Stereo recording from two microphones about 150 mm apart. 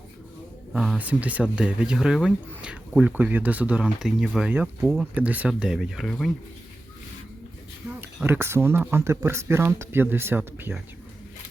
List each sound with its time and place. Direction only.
0.7 s speech: 5° right (ahead or behind)
5.1 s speech: 10° right (ahead or behind)
8.0 s speech: 15° right (ahead or behind)